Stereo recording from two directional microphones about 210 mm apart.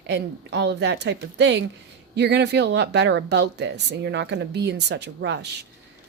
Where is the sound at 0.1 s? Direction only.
55° right (ahead or behind).